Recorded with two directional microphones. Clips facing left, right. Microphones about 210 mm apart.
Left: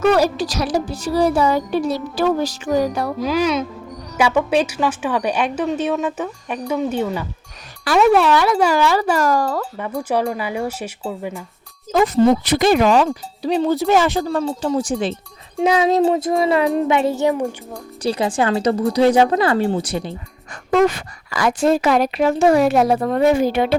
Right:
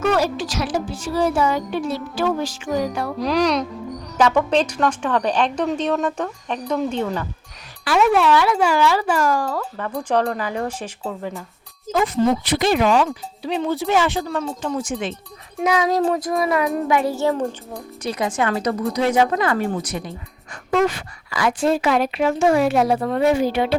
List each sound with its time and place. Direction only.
0.0 s speech: 35° left (ahead or behind)
3.2 s a woman's voice: centre (ahead or behind)
7.9 s speech: 40° left (ahead or behind)
9.7 s a woman's voice: 10° left (ahead or behind)
11.9 s speech: 40° left (ahead or behind); by 17.5 s 15° left (ahead or behind)
18.0 s speech: 30° left (ahead or behind)
20.5 s a woman's voice: 40° left (ahead or behind)